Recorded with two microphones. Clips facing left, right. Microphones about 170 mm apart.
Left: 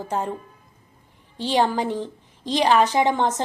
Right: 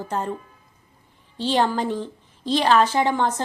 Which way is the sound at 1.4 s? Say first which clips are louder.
Even; 15° left (ahead or behind).